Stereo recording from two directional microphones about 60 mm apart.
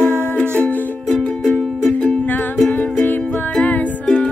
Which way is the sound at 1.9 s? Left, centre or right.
Left.